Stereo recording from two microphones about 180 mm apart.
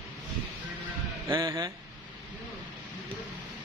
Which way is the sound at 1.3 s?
15° right (ahead or behind).